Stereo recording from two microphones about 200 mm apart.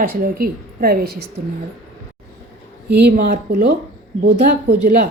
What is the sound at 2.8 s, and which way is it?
Speech, 55° right (ahead or behind).